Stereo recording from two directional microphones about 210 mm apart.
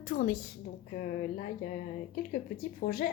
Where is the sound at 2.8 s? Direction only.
45° left (ahead or behind).